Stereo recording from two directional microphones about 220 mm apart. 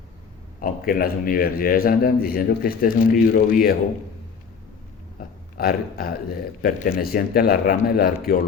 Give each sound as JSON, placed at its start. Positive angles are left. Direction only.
{"t": 0.6, "sound": "speech", "side_deg": 40}
{"t": 5.5, "sound": "speech", "side_deg": 45}